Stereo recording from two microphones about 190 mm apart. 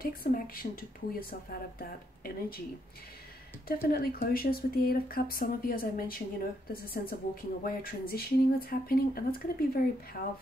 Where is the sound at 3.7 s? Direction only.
55° left (ahead or behind).